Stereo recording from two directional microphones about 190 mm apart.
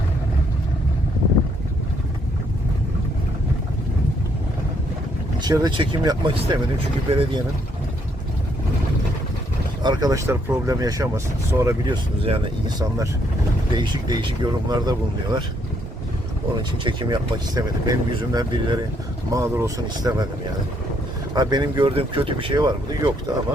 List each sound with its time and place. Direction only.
5.4 s speech: 20° right (ahead or behind)
9.8 s speech: 20° right (ahead or behind)
12.2 s speech: 30° right (ahead or behind)
13.7 s speech: 25° right (ahead or behind)
16.8 s speech: 25° right (ahead or behind)
21.3 s speech: 20° right (ahead or behind)